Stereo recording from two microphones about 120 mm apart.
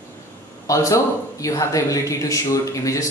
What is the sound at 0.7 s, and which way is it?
Speech, 25° left (ahead or behind).